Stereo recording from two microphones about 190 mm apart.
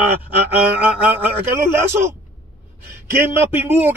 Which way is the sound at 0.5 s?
10° right (ahead or behind).